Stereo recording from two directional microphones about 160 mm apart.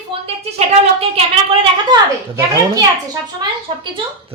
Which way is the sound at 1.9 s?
30° right (ahead or behind).